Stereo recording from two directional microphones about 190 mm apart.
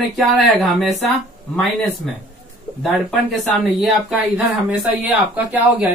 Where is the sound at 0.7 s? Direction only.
Centre (ahead or behind).